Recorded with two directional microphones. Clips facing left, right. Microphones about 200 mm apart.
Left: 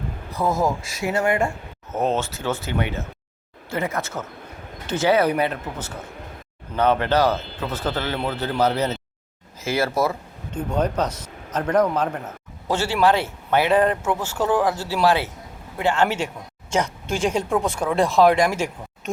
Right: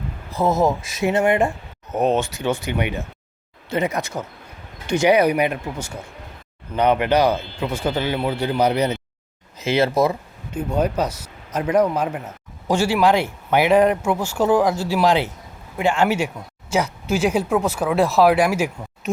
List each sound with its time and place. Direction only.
0.3 s speech: 25° right (ahead or behind); by 19.1 s 10° right (ahead or behind)